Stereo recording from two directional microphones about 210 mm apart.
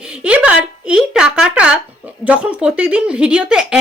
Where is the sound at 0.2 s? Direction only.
5° right (ahead or behind).